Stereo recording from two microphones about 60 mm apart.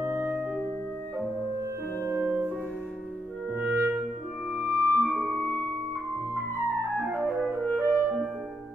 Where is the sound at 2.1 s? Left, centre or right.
Right.